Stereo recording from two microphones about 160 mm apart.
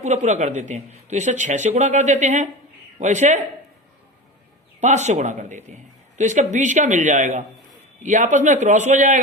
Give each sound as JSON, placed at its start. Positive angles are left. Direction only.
{"t": 0.0, "sound": "a man's voice", "side_deg": -45}
{"t": 4.8, "sound": "a man's voice", "side_deg": -45}